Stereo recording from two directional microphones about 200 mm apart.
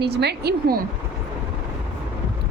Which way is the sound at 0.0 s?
55° right (ahead or behind).